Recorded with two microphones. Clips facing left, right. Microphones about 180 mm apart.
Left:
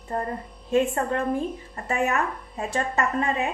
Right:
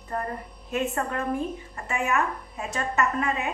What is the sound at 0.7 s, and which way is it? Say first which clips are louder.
A woman's voice: left 5 dB; 30° left (ahead or behind).